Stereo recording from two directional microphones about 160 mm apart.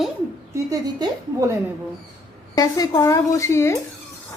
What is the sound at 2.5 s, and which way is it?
Speech, 20° left (ahead or behind).